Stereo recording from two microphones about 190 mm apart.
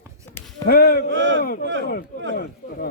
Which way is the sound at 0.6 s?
55° left (ahead or behind).